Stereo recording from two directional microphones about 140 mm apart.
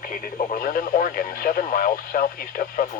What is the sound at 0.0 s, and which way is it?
Speech, 85° left.